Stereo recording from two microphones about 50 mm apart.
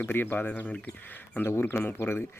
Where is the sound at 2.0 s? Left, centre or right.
Left.